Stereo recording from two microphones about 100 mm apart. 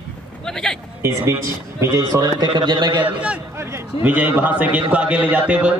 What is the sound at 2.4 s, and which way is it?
Speech, 50° right (ahead or behind).